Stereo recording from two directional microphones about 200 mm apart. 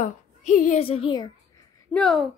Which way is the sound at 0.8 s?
25° left (ahead or behind).